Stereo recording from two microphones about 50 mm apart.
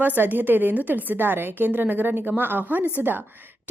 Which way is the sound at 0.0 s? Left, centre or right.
Right.